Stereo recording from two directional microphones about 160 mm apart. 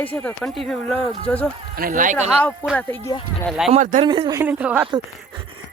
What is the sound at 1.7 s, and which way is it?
Speech, 60° right (ahead or behind).